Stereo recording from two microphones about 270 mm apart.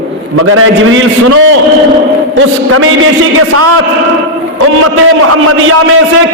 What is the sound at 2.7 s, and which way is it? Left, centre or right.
A man's voice, right.